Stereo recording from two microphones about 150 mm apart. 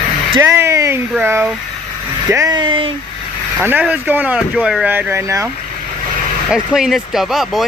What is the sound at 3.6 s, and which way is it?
Speech, 10° right (ahead or behind).